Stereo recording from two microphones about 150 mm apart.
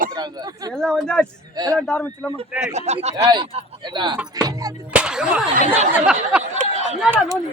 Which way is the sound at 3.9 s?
30° right (ahead or behind).